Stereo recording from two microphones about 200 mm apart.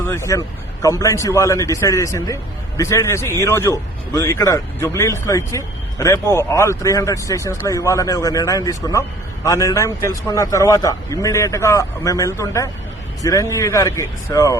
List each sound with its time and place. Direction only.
0.0 s speech: 15° left (ahead or behind)